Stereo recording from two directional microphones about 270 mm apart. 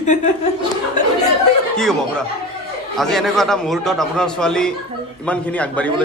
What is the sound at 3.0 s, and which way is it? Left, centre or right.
A man's voice, centre.